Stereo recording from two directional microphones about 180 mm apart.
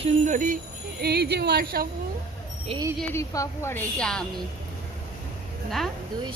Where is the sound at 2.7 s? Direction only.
30° right (ahead or behind).